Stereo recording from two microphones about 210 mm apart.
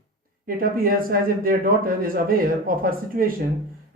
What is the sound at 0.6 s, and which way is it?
Speech, 45° right (ahead or behind).